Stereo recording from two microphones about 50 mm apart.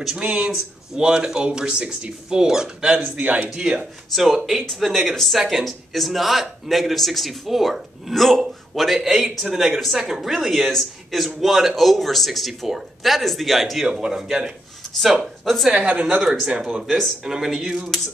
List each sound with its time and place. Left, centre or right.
0.2 s a woman's voice: right
0.5 s speech: centre
3.0 s a man's voice: right
3.5 s a woman's voice: right
4.1 s speech: centre
14.0 s a woman's voice: centre
15.7 s a woman's voice: right; by 17.9 s centre